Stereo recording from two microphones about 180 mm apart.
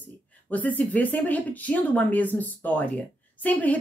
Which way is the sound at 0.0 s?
10° left (ahead or behind).